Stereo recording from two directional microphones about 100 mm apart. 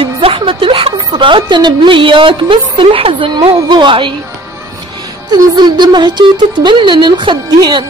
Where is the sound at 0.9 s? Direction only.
50° right (ahead or behind).